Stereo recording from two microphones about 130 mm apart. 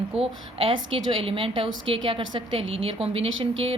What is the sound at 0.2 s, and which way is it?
A woman's voice, 45° right (ahead or behind).